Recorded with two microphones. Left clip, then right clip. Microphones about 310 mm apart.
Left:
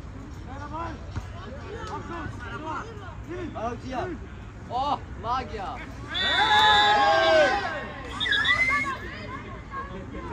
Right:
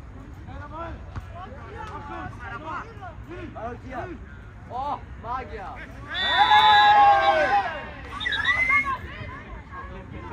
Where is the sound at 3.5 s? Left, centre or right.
Left.